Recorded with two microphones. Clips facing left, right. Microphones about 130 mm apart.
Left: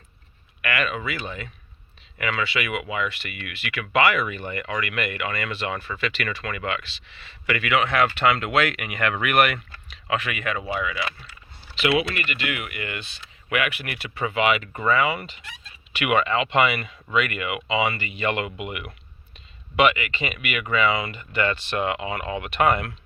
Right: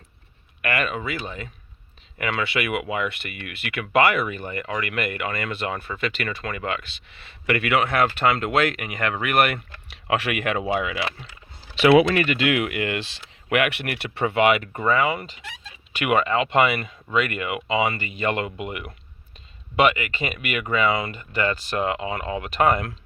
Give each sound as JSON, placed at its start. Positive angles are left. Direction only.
{"t": 0.6, "sound": "speech", "side_deg": -45}
{"t": 2.1, "sound": "speech", "side_deg": -50}
{"t": 10.1, "sound": "speech", "side_deg": -65}
{"t": 12.0, "sound": "speech", "side_deg": -90}
{"t": 13.5, "sound": "speech", "side_deg": -60}
{"t": 14.8, "sound": "speech", "side_deg": -40}